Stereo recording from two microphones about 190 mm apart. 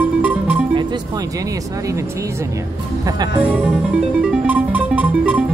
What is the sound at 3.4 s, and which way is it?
Speech, 10° right (ahead or behind).